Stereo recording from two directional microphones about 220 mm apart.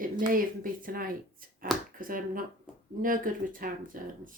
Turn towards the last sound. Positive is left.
turn(degrees=-40)  # may be behind; listen again after turning